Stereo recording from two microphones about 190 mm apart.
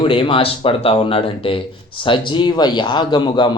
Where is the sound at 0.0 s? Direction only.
25° left (ahead or behind).